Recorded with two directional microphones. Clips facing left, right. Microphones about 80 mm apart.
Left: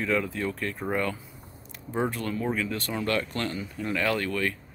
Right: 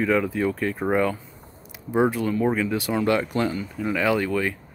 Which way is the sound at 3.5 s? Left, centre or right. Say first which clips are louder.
Right 4 dB; centre.